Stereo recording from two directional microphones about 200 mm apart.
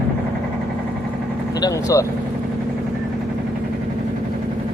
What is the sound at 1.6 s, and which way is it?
Speech, 15° left (ahead or behind).